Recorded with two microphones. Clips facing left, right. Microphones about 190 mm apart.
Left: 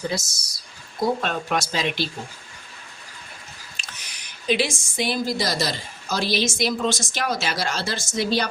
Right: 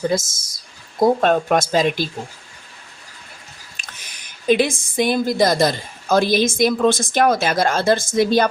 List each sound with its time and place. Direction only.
0.1 s speech: 50° right (ahead or behind)
3.8 s speech: 50° right (ahead or behind)